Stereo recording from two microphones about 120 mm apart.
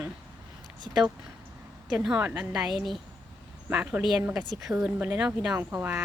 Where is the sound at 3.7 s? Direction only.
10° right (ahead or behind).